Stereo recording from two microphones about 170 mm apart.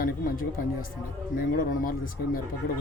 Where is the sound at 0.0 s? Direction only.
55° left (ahead or behind).